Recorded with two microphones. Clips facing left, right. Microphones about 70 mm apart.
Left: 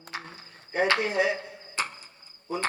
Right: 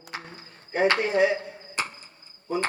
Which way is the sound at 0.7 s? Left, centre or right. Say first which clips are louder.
Right 3 dB; right.